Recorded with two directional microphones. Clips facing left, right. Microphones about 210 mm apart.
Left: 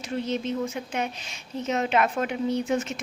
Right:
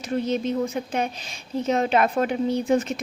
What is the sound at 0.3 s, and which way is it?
A woman's voice, 35° right (ahead or behind).